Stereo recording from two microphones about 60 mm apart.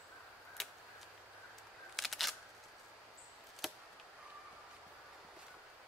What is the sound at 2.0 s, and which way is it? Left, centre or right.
Single-lens reflex camera, centre.